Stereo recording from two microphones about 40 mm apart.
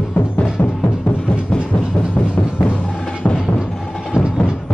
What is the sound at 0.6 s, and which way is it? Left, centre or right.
Music, left.